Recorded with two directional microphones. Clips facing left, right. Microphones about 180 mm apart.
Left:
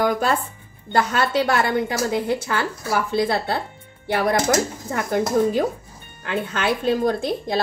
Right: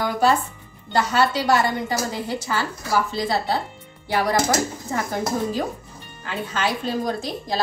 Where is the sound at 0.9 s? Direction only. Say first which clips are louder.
Left 1 dB; 55° left (ahead or behind).